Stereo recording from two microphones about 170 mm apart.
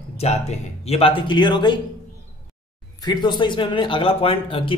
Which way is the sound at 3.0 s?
25° left (ahead or behind).